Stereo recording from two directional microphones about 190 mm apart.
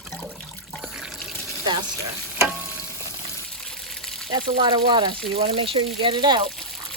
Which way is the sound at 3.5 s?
5° left (ahead or behind).